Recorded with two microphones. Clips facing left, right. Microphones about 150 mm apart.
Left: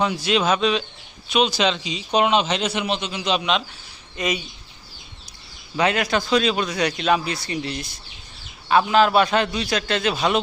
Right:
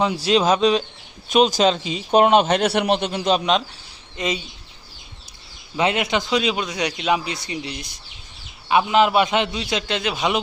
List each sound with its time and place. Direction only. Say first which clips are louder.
0.0 s a man's voice: right 2 dB; 30° right (ahead or behind)
4.2 s speech: even; 25° right (ahead or behind)
5.7 s a man's voice: even; 20° right (ahead or behind)